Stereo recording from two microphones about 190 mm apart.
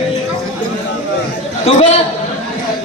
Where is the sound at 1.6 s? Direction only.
35° left (ahead or behind).